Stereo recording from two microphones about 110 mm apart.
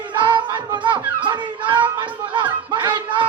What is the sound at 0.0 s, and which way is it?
Music, 40° right (ahead or behind).